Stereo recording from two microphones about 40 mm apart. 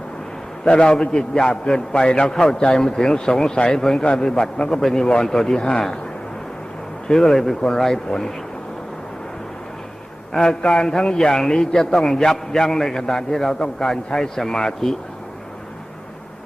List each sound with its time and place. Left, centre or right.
0.6 s a man's voice: centre
7.1 s a man's voice: centre
10.3 s a man's voice: centre